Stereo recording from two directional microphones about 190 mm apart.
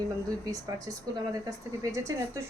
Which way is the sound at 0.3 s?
20° right (ahead or behind).